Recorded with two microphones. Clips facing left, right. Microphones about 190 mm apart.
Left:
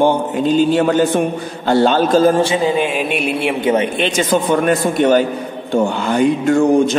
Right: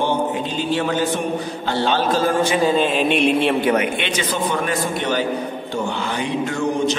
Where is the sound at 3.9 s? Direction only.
40° left (ahead or behind).